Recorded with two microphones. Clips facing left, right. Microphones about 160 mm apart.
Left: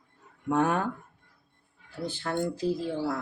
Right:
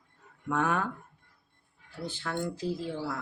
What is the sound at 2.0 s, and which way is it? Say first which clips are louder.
Speech: left 4 dB; 40° left (ahead or behind).